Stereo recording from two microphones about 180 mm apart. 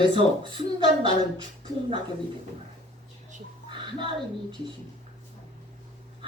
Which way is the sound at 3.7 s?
30° right (ahead or behind).